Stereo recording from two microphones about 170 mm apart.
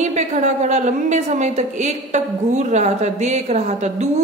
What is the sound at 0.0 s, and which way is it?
A woman's voice, 45° right (ahead or behind).